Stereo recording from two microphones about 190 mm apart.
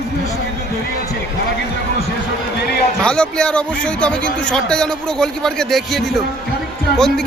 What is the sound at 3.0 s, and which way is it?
A man's voice, 5° left (ahead or behind).